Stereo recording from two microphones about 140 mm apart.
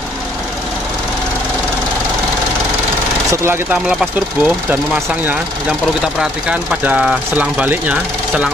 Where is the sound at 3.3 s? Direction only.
15° right (ahead or behind).